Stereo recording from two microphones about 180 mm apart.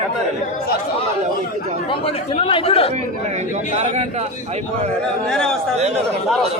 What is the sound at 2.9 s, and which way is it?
A man's voice, 40° right (ahead or behind).